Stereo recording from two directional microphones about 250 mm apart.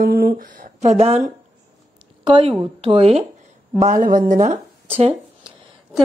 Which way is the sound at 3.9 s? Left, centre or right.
Right.